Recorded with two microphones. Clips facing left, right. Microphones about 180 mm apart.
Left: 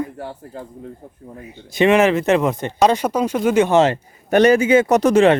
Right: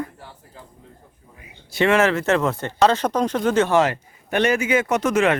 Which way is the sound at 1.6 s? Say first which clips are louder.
Left 4 dB; 20° left (ahead or behind).